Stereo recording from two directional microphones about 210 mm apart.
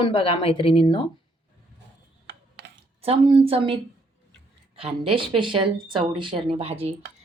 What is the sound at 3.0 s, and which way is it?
Speech, 25° right (ahead or behind).